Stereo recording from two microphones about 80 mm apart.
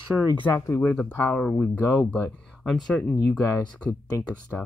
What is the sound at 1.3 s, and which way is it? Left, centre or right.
Speech, centre.